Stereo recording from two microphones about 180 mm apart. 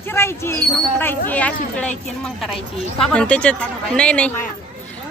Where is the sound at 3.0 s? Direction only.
5° left (ahead or behind).